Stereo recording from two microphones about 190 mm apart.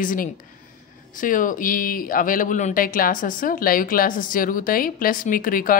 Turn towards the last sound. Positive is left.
turn(degrees=45)  # may be behind; listen again after turning